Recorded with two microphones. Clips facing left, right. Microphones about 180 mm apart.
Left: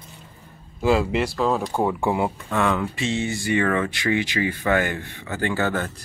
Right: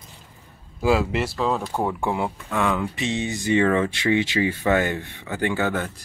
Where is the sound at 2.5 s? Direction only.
10° right (ahead or behind).